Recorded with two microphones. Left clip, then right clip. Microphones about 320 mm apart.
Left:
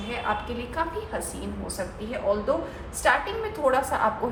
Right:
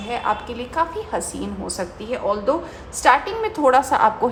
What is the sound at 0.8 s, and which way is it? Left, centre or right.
Speech, centre.